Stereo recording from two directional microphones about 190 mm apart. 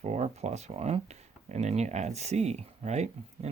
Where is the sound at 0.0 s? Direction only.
35° right (ahead or behind).